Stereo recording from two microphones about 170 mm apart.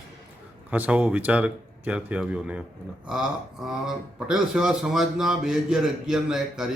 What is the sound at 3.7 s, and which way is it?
A man's voice, 5° right (ahead or behind).